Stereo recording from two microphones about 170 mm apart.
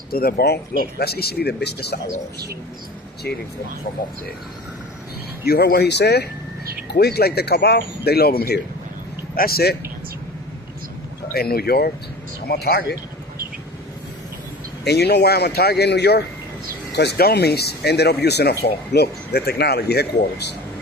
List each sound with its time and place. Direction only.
0.1 s speech: 65° left (ahead or behind)
3.3 s speech: 70° left (ahead or behind)
5.5 s speech: 65° left (ahead or behind)
11.3 s speech: 65° left (ahead or behind)
14.8 s speech: 75° left (ahead or behind)